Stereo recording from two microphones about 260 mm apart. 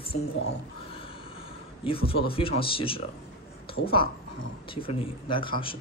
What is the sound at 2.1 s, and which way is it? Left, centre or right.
A man's voice, left.